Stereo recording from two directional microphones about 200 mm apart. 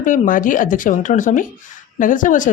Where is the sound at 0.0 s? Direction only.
40° left (ahead or behind).